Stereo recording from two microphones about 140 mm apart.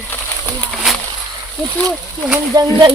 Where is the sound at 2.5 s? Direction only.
25° right (ahead or behind).